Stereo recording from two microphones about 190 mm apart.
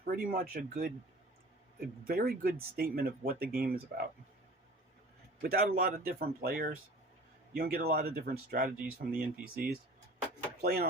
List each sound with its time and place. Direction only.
0.0 s speech: 50° right (ahead or behind)
2.0 s speech: 50° right (ahead or behind)
5.4 s a man's voice: 55° right (ahead or behind)
8.8 s speech: 10° right (ahead or behind)
9.4 s speech: 55° right (ahead or behind)